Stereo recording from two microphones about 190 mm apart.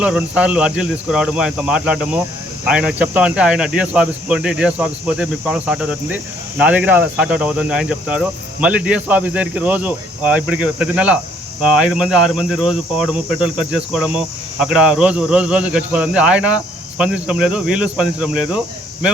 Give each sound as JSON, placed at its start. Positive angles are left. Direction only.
{"t": 0.0, "sound": "speech", "side_deg": -5}